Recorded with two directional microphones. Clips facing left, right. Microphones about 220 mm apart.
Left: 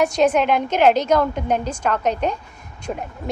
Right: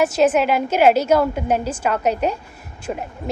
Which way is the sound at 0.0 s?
5° right (ahead or behind).